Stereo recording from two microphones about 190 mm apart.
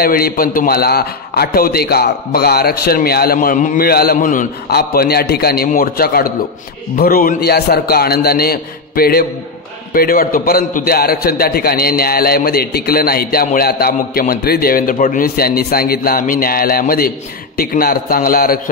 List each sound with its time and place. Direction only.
0.0 s a man's voice: 50° left (ahead or behind)